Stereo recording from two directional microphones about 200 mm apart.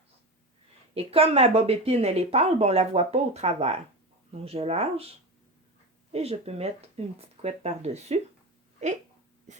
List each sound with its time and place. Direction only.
0.9 s speech: 30° right (ahead or behind)
6.1 s speech: 30° right (ahead or behind)